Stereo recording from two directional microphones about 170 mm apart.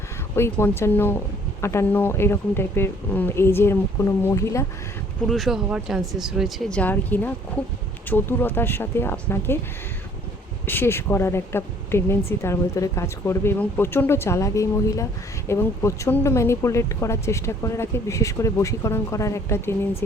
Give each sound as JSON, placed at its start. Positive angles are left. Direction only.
{"t": 0.3, "sound": "speech", "side_deg": 15}
{"t": 5.3, "sound": "speech", "side_deg": 0}
{"t": 10.7, "sound": "speech", "side_deg": 15}